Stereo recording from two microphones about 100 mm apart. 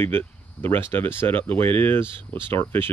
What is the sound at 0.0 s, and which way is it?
Speech, 20° left (ahead or behind).